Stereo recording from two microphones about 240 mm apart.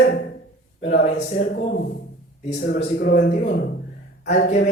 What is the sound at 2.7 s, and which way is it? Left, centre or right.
A woman's voice, left.